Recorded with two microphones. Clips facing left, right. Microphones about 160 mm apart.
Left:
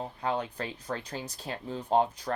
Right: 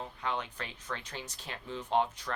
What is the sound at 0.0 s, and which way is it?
Speech, 35° left (ahead or behind).